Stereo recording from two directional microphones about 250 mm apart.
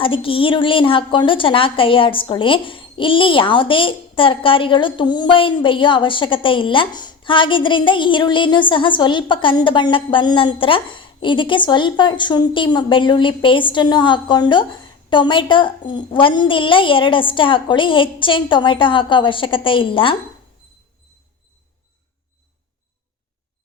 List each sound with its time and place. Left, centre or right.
0.0 s a woman's voice: left